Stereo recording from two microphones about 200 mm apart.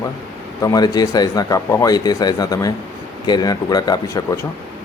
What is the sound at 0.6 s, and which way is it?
Speech, 15° left (ahead or behind).